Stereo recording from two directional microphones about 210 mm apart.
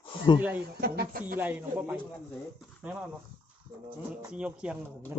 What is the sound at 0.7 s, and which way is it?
Speech, 50° right (ahead or behind).